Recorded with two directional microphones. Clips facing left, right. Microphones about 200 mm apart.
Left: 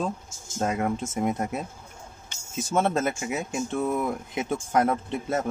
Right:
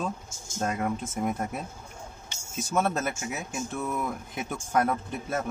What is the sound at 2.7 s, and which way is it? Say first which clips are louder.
Speech: left 3 dB; 25° left (ahead or behind).